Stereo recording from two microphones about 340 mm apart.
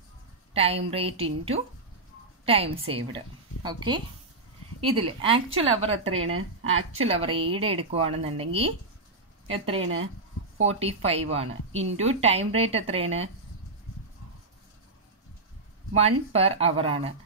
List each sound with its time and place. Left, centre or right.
0.5 s speech: centre
6.2 s speech: right
7.0 s speech: centre
10.6 s speech: centre
15.9 s speech: centre